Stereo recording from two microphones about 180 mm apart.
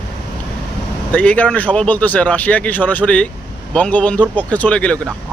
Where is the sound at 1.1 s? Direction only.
10° left (ahead or behind).